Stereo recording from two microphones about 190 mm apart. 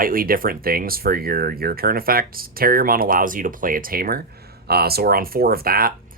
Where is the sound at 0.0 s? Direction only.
50° right (ahead or behind).